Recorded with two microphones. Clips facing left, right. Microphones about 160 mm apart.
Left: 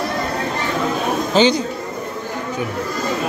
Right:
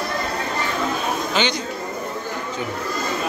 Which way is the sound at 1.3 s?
40° left (ahead or behind).